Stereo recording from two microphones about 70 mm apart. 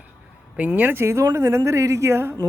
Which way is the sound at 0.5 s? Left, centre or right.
Right.